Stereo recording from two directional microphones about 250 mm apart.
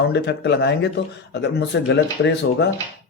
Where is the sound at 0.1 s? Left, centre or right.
Left.